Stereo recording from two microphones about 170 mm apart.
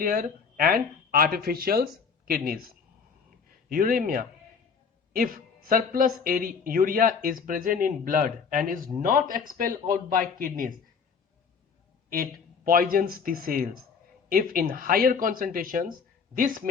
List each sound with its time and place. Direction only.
0.0 s speech: 55° right (ahead or behind)
12.1 s speech: 60° right (ahead or behind)